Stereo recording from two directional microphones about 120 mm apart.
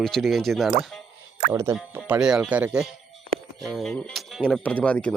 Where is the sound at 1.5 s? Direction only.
20° right (ahead or behind).